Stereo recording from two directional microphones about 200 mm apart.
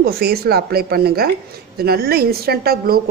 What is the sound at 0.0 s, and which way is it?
A woman's voice, 50° right (ahead or behind).